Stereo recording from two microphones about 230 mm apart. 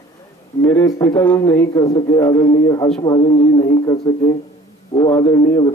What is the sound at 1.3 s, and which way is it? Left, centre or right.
A man's voice, left.